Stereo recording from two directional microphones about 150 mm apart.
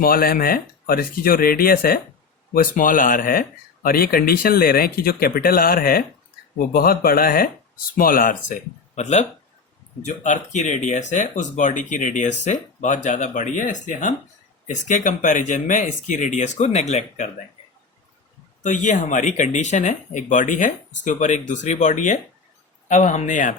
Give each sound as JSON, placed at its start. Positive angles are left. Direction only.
{"t": 0.0, "sound": "speech", "side_deg": 75}
{"t": 2.5, "sound": "speech", "side_deg": 65}
{"t": 3.8, "sound": "speech", "side_deg": 80}
{"t": 9.0, "sound": "speech", "side_deg": 50}
{"t": 18.6, "sound": "speech", "side_deg": 55}